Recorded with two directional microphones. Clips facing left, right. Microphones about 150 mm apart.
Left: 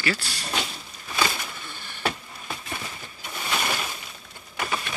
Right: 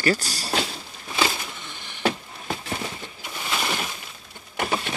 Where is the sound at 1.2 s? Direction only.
20° right (ahead or behind).